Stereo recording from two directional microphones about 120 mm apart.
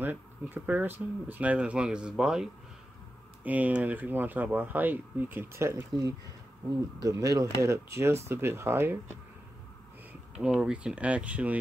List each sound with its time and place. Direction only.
0.0 s speech: 15° right (ahead or behind)
10.4 s speech: 10° right (ahead or behind)